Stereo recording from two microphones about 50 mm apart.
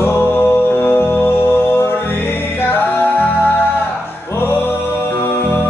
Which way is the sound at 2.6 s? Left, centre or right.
Left.